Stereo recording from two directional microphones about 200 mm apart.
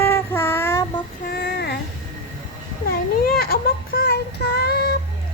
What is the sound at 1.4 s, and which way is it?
Child singing, 55° left (ahead or behind).